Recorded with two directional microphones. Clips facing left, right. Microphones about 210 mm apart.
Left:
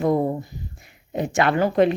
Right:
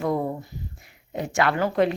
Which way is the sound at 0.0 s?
25° left (ahead or behind).